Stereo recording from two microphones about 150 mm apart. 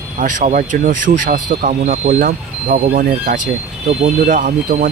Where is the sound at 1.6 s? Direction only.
55° right (ahead or behind).